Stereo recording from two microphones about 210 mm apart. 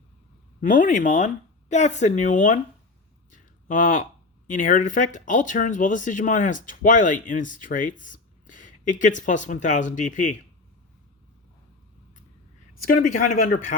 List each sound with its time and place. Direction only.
0.6 s speech: 40° left (ahead or behind)
3.3 s a sound: 40° left (ahead or behind)
4.4 s speech: 40° left (ahead or behind)
12.9 s speech: 40° left (ahead or behind)